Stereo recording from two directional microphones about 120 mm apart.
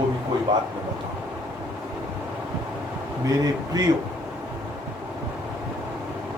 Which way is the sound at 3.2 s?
30° right (ahead or behind).